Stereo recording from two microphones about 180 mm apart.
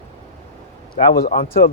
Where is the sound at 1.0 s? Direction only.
35° left (ahead or behind).